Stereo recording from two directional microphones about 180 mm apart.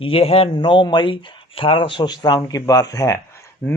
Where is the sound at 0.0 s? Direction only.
30° left (ahead or behind).